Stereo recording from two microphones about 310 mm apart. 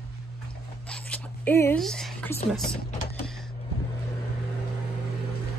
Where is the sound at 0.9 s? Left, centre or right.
Centre.